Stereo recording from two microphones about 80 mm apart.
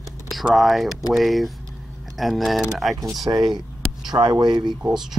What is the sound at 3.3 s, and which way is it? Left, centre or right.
Speech, right.